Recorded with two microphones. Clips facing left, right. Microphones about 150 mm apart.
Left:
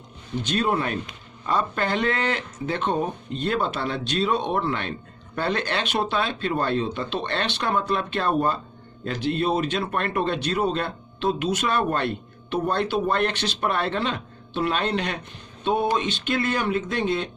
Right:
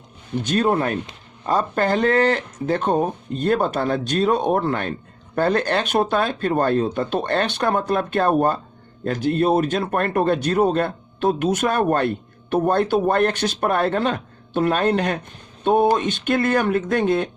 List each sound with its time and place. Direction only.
0.4 s speech: 45° right (ahead or behind)